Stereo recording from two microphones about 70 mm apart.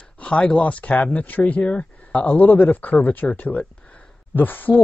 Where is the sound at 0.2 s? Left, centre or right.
Centre.